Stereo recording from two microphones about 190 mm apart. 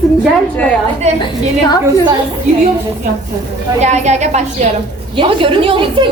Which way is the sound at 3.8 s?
35° right (ahead or behind).